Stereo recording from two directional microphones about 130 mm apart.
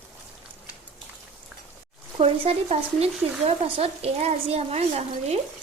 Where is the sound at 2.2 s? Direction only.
50° right (ahead or behind).